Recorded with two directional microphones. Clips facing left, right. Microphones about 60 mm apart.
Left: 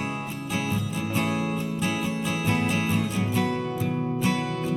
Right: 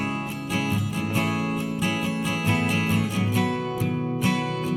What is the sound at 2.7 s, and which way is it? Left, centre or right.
Music, right.